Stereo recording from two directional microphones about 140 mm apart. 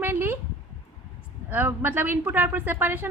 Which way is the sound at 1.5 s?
15° right (ahead or behind).